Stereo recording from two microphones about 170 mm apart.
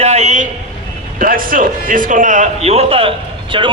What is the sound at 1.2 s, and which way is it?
A man's voice, 55° right (ahead or behind).